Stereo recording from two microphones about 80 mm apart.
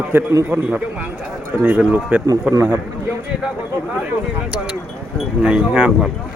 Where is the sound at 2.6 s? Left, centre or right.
Right.